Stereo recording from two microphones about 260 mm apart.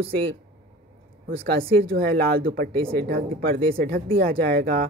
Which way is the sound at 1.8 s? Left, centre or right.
Right.